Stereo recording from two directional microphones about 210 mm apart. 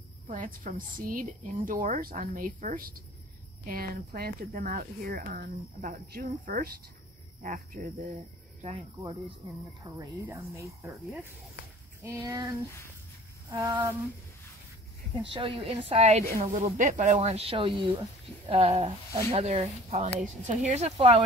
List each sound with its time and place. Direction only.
0.3 s a woman's voice: 40° right (ahead or behind)
9.8 s speech: 15° right (ahead or behind)
12.0 s speech: 15° right (ahead or behind)
13.5 s speech: 15° right (ahead or behind)
15.3 s a woman's voice: 25° right (ahead or behind)